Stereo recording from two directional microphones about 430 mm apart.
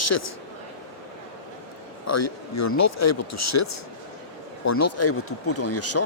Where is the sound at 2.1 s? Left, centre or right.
Left.